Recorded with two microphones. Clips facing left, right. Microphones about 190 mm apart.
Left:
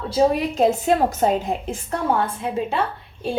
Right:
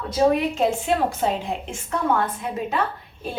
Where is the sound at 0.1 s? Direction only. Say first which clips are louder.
Even; 40° left (ahead or behind).